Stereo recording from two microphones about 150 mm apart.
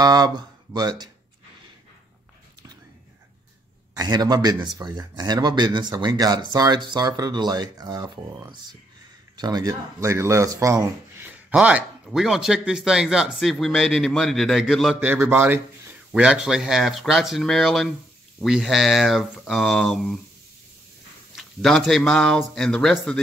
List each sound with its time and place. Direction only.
0.0 s speech: 25° right (ahead or behind)
3.9 s speech: 25° right (ahead or behind); by 15.0 s centre (ahead or behind)
15.0 s a man's voice: 10° right (ahead or behind)
21.4 s speech: centre (ahead or behind)